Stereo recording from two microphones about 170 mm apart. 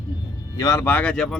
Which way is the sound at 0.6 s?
20° left (ahead or behind).